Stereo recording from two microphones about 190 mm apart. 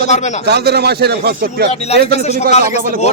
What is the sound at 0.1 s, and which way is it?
Speech, 40° left (ahead or behind).